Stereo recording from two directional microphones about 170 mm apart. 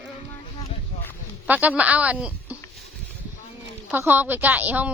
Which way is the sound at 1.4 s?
10° right (ahead or behind).